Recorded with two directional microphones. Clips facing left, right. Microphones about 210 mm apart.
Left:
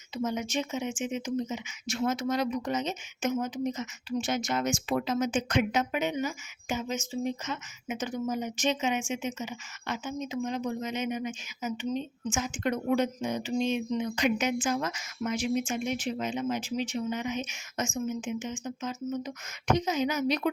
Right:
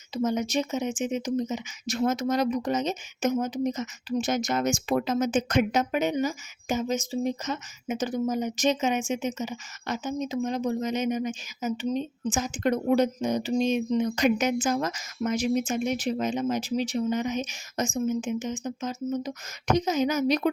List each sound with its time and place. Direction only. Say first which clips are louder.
0.1 s speech: right 5 dB; 40° right (ahead or behind)